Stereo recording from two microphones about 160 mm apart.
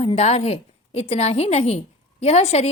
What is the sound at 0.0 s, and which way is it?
A woman's voice, 40° left (ahead or behind).